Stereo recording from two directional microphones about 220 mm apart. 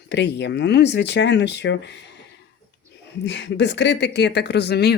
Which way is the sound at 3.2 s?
55° left (ahead or behind).